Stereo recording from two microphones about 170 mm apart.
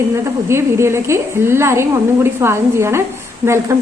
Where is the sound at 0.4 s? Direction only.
15° right (ahead or behind).